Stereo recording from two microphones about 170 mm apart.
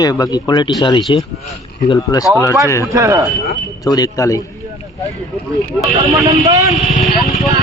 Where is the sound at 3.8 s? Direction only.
20° left (ahead or behind).